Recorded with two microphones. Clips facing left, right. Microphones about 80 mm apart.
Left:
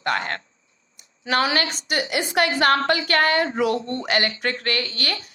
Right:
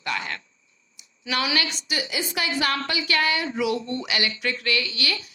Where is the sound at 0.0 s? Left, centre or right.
Left.